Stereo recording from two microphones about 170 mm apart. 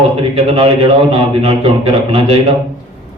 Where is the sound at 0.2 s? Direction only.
35° right (ahead or behind).